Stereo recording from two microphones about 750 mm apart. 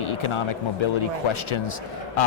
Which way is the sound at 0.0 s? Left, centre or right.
Left.